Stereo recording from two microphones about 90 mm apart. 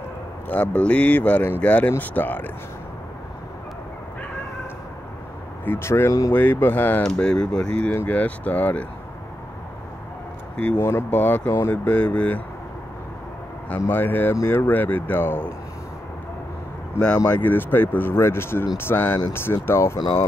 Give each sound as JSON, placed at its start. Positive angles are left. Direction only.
{"t": 0.5, "sound": "speech", "side_deg": 15}
{"t": 5.7, "sound": "speech", "side_deg": 25}
{"t": 6.3, "sound": "speech", "side_deg": 25}
{"t": 7.0, "sound": "speech", "side_deg": 10}
{"t": 10.5, "sound": "speech", "side_deg": 10}
{"t": 10.9, "sound": "speech", "side_deg": 25}
{"t": 11.8, "sound": "speech", "side_deg": 15}
{"t": 13.7, "sound": "speech", "side_deg": 25}
{"t": 17.3, "sound": "speech", "side_deg": 20}